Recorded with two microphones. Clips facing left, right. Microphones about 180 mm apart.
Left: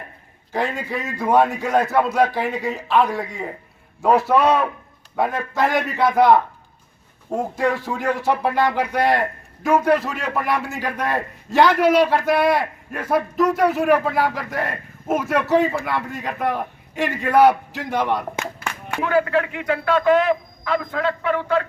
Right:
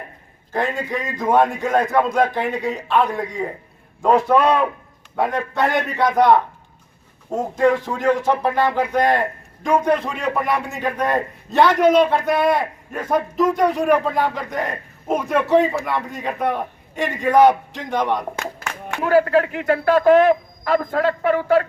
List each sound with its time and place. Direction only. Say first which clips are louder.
0.8 s a man's voice: right 2 dB; 5° left (ahead or behind)
19.0 s a man's voice: right 4 dB; 40° right (ahead or behind)